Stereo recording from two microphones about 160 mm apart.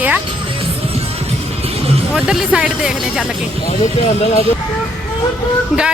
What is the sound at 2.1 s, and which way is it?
Speech, 5° right (ahead or behind).